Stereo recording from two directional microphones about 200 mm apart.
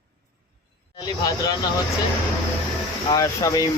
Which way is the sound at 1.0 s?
20° left (ahead or behind).